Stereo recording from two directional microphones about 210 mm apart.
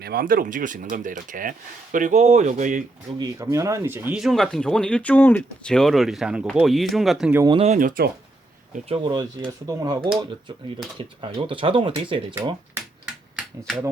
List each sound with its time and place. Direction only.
0.0 s speech: 45° right (ahead or behind)
3.2 s speech: 15° right (ahead or behind)
7.4 s speech: 25° right (ahead or behind); by 8.1 s 45° right (ahead or behind)
8.9 s speech: 20° right (ahead or behind)
13.3 s a sound: centre (ahead or behind)